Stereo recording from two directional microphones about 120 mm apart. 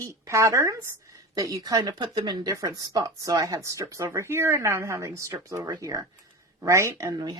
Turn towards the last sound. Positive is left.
turn(degrees=-35)  # may be behind; listen again after turning